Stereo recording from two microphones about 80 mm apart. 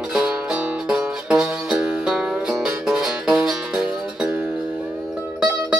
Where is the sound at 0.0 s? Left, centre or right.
Centre.